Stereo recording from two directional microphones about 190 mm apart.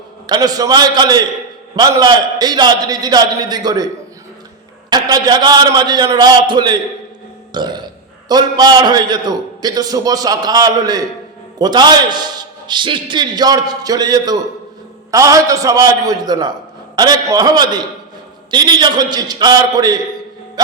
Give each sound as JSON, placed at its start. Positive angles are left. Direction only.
{"t": 0.3, "sound": "a man's voice", "side_deg": -20}
{"t": 4.9, "sound": "a man's voice", "side_deg": -20}